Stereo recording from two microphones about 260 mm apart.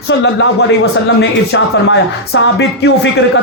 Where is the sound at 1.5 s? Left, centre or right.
Left.